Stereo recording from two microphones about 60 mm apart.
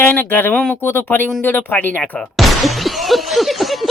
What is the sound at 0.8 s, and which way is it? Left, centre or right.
Speech, left.